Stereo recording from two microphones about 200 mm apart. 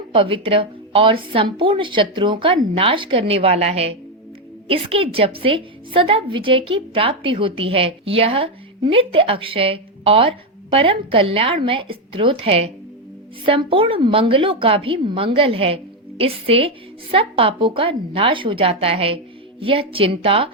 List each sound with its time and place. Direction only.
0.1 s a woman's voice: 25° right (ahead or behind)